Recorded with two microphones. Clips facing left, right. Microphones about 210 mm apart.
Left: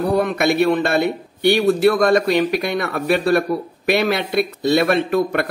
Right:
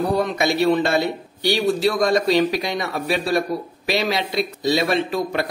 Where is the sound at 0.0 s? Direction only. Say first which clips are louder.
Left 3 dB; 60° left (ahead or behind).